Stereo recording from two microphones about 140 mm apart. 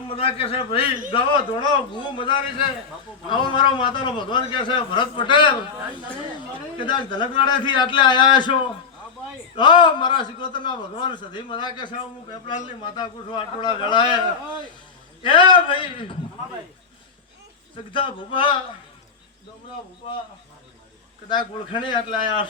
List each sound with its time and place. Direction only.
0.1 s a man's voice: 40° left (ahead or behind)
9.6 s a man's voice: 35° left (ahead or behind)
15.2 s a man's voice: 35° left (ahead or behind)
17.9 s a man's voice: 35° left (ahead or behind)
21.2 s a man's voice: 35° left (ahead or behind)